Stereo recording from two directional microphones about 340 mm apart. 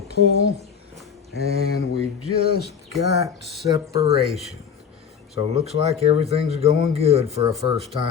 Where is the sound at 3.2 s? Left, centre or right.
Centre.